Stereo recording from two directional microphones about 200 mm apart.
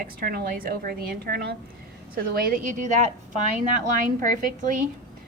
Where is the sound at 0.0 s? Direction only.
50° right (ahead or behind).